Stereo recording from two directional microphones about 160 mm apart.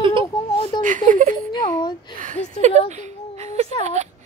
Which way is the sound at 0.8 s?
55° right (ahead or behind).